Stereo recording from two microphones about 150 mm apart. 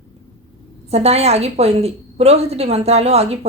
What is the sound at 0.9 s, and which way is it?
A woman's voice, 45° right (ahead or behind).